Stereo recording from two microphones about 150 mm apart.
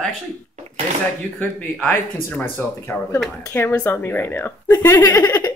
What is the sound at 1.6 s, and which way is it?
Speech, 10° left (ahead or behind).